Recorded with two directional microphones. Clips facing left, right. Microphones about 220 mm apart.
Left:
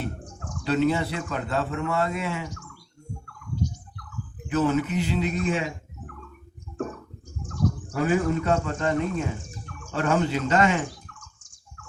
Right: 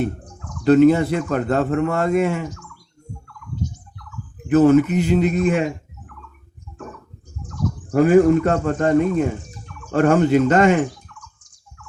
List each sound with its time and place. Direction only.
0.6 s a man's voice: 50° right (ahead or behind)
4.4 s a man's voice: 50° right (ahead or behind)
7.9 s a man's voice: 50° right (ahead or behind)